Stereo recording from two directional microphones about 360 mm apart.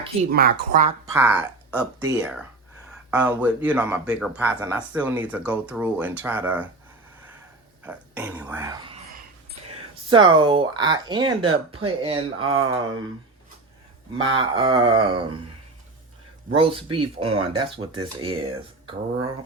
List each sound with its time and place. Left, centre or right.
0.3 s speech: right
1.0 s speech: centre
7.9 s speech: centre
10.1 s speech: centre
14.3 s speech: centre
16.6 s speech: centre